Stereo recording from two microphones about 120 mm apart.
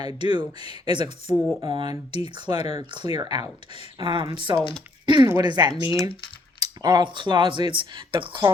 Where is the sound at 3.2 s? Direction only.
35° right (ahead or behind).